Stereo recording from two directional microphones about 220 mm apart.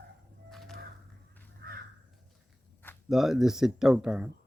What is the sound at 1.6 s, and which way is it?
Crow, 50° right (ahead or behind).